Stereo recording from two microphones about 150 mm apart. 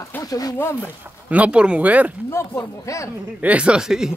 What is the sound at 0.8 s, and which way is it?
Speech, 10° right (ahead or behind).